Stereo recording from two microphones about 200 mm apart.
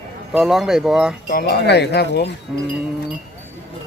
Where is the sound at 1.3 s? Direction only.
45° left (ahead or behind).